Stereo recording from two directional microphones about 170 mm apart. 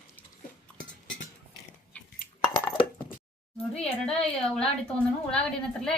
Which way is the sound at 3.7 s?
5° left (ahead or behind).